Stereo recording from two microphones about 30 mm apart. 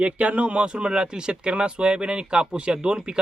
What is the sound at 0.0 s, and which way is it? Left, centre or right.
Speech, right.